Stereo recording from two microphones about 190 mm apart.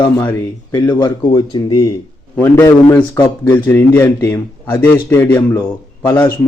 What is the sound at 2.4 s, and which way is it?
Speech, 15° left (ahead or behind).